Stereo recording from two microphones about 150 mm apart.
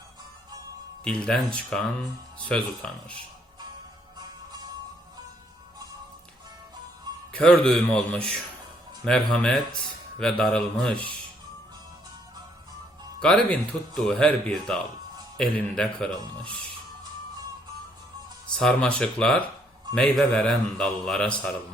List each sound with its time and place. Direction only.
1.0 s a man's voice: 5° left (ahead or behind)
4.2 s music: 25° right (ahead or behind)
7.3 s a man's voice: 5° left (ahead or behind)
13.1 s a man's voice: 5° left (ahead or behind)
18.5 s a man's voice: 5° left (ahead or behind)